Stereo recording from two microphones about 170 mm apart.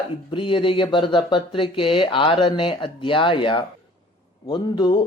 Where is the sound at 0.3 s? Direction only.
30° left (ahead or behind).